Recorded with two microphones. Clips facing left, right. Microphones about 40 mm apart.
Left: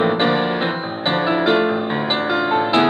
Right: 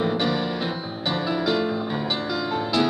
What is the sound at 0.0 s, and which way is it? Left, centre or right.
Music, left.